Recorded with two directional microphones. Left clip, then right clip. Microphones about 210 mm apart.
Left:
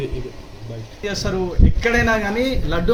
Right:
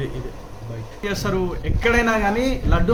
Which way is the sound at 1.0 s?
10° right (ahead or behind).